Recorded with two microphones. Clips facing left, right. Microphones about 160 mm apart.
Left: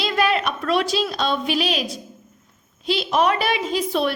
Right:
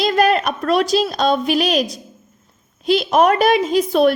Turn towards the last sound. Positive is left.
turn(degrees=-45)  # may be behind; listen again after turning